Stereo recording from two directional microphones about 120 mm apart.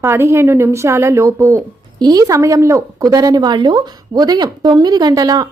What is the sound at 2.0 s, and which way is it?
A woman's voice, 35° right (ahead or behind).